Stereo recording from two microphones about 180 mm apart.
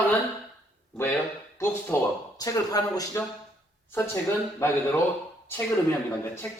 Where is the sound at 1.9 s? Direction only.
15° left (ahead or behind).